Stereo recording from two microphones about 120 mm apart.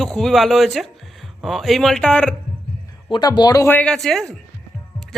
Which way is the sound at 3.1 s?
40° left (ahead or behind).